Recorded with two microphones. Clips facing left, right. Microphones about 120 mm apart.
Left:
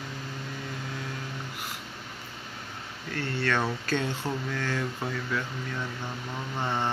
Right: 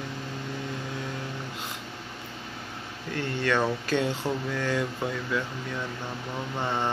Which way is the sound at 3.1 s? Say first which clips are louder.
Right 2 dB; 15° right (ahead or behind).